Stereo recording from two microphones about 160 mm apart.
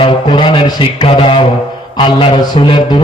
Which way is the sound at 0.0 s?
30° left (ahead or behind).